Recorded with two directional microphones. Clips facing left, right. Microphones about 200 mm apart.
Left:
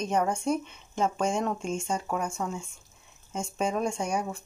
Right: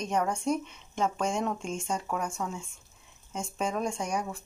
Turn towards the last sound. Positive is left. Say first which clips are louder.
# left 2 dB
turn(degrees=0)  # may be behind; listen again after turning